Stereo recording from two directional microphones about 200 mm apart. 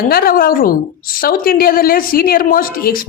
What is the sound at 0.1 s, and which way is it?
A woman's voice, 45° left (ahead or behind).